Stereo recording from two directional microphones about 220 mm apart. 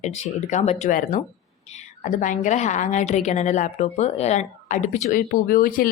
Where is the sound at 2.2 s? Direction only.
35° left (ahead or behind).